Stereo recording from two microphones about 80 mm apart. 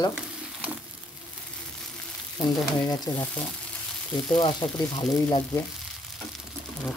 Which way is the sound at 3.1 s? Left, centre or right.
Left.